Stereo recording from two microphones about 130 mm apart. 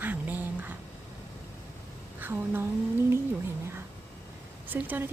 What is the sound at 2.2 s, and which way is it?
Speech, 15° right (ahead or behind).